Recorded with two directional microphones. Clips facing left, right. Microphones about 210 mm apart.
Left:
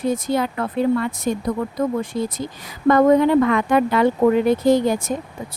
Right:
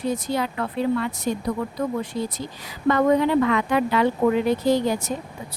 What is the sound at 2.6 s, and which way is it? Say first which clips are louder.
Speech: left 5 dB; 50° left (ahead or behind).